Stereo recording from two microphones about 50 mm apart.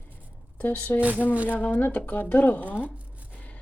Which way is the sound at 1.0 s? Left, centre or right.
Right.